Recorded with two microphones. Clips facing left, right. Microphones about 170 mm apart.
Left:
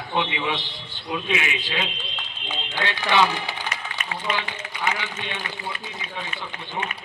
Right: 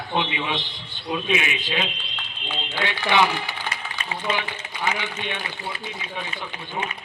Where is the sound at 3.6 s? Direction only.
30° right (ahead or behind).